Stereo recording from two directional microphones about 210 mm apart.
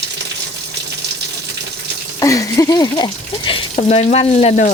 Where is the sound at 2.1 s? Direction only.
15° left (ahead or behind).